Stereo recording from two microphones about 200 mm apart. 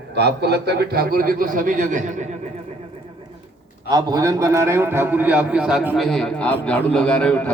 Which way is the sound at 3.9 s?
20° right (ahead or behind).